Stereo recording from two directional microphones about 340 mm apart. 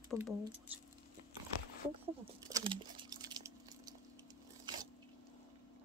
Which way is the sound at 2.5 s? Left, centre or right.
Centre.